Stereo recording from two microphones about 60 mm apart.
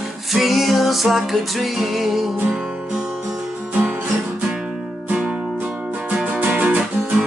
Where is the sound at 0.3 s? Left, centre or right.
Centre.